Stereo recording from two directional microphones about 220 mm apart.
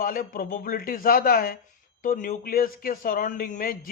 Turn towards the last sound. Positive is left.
turn(degrees=40)  # may be behind; listen again after turning